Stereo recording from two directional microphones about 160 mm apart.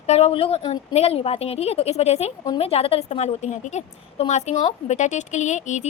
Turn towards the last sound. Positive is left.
turn(degrees=50)  # may be behind; listen again after turning